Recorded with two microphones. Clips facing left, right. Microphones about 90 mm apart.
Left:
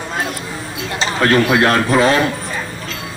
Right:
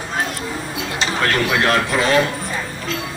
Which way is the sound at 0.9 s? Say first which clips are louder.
Left 5 dB; 35° left (ahead or behind).